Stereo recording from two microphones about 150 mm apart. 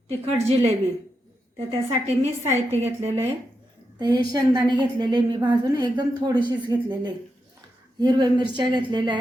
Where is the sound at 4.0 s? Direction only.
30° right (ahead or behind).